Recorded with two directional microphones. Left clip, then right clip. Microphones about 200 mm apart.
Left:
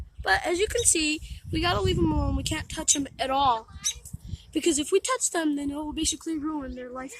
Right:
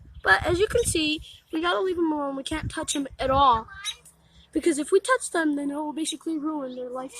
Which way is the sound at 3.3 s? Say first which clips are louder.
Right 4 dB; 55° left (ahead or behind).